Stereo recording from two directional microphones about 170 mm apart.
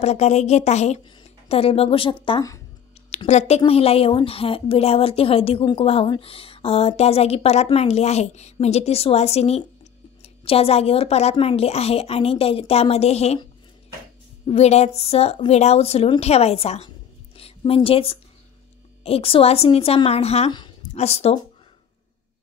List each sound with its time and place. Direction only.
0.0 s a woman's voice: 40° left (ahead or behind)
14.4 s a woman's voice: 40° left (ahead or behind)